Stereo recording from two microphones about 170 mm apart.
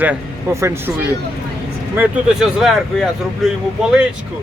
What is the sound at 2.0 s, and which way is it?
Speech, 5° right (ahead or behind).